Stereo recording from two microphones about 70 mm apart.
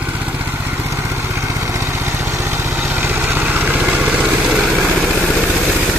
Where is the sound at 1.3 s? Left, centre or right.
Right; by 4.9 s centre.